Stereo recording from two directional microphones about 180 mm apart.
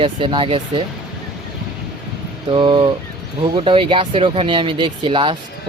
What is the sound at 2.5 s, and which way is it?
Speech, 25° right (ahead or behind).